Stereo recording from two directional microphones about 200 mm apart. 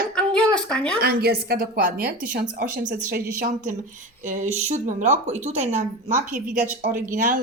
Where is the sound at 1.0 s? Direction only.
50° right (ahead or behind).